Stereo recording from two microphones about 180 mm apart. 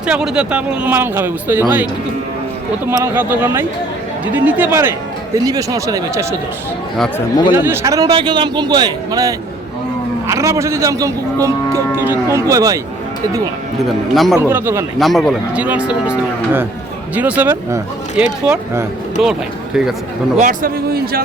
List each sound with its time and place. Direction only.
0.0 s speech: 5° right (ahead or behind)
2.9 s speech: 15° right (ahead or behind)
7.5 s a man's voice: 10° right (ahead or behind)
13.8 s cattle: centre (ahead or behind)
14.3 s speech: 10° right (ahead or behind)
14.9 s cattle: centre (ahead or behind)
17.2 s speech: 10° right (ahead or behind)
19.2 s cattle: centre (ahead or behind)
20.4 s speech: 50° right (ahead or behind)